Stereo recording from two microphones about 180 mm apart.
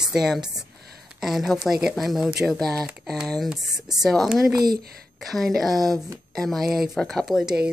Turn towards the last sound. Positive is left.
turn(degrees=0)  # may be behind; listen again after turning